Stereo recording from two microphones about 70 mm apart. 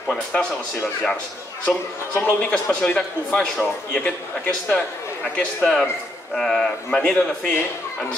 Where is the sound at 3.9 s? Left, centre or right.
Centre.